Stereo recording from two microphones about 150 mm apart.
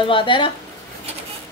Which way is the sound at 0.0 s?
35° left (ahead or behind).